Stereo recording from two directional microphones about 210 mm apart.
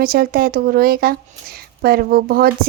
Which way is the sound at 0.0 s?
45° right (ahead or behind).